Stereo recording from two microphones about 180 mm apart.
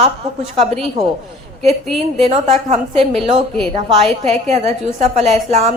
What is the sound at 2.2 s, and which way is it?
Speech, 35° right (ahead or behind).